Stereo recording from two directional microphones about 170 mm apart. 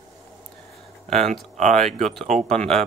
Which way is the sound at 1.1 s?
45° right (ahead or behind).